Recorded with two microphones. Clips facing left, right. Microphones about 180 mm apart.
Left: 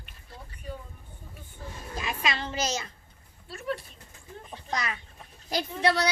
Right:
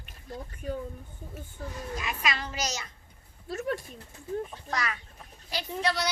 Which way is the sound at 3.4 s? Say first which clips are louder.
Right 2 dB; 45° right (ahead or behind).